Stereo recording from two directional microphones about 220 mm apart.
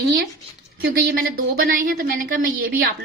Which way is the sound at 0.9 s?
40° right (ahead or behind).